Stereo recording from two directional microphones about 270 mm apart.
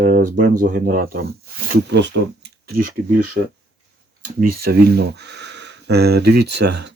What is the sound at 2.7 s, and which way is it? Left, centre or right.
Speech, right.